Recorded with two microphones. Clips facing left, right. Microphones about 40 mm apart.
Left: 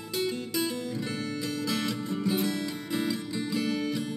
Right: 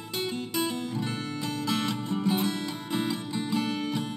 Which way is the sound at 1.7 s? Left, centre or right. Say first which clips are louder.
Right 4 dB; right.